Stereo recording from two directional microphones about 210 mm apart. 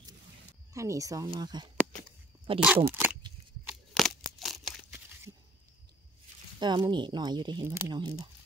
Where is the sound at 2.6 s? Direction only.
5° right (ahead or behind).